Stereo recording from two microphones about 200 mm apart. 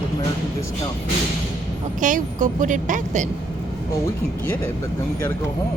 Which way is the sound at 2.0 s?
40° right (ahead or behind).